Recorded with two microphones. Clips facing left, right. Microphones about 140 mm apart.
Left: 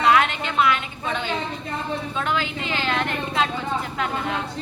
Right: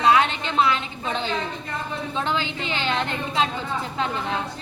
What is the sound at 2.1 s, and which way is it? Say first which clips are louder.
A woman's voice: right 1 dB; 25° right (ahead or behind).